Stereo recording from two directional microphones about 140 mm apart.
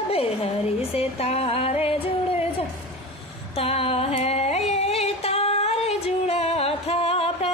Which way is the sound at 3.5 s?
45° left (ahead or behind).